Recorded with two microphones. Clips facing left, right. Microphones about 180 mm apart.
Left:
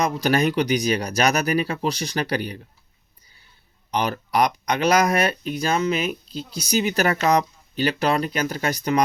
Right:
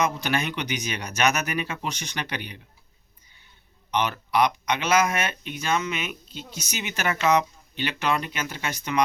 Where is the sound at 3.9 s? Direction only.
35° left (ahead or behind).